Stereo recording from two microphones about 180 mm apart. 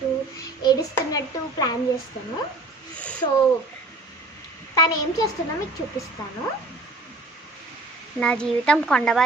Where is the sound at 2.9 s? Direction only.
5° left (ahead or behind).